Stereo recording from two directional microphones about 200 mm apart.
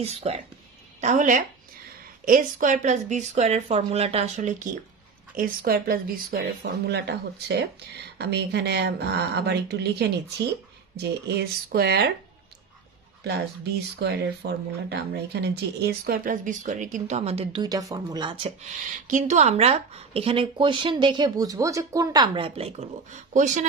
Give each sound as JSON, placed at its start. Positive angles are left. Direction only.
{"t": 0.0, "sound": "speech", "side_deg": -30}
{"t": 13.2, "sound": "speech", "side_deg": -55}
{"t": 19.0, "sound": "speech", "side_deg": -35}